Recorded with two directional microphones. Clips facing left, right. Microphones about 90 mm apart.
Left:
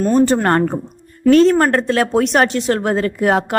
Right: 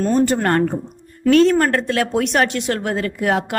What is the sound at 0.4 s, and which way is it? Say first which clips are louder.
A woman's voice: left 2 dB; 30° left (ahead or behind).